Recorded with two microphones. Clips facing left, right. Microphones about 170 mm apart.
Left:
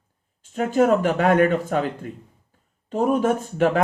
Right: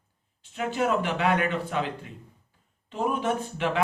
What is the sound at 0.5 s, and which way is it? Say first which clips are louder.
Speech: left 8 dB; 45° left (ahead or behind).